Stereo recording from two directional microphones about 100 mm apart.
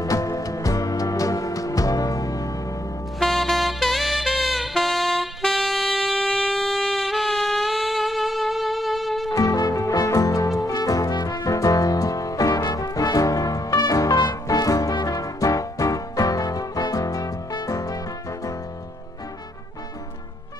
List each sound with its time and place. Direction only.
0.0 s music: 35° left (ahead or behind)
3.2 s saxophone: centre (ahead or behind)
9.3 s music: 35° left (ahead or behind)
12.5 s brass instrument: 40° left (ahead or behind)
14.2 s music: 40° left (ahead or behind)